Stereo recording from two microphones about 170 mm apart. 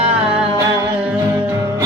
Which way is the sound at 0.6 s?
5° right (ahead or behind).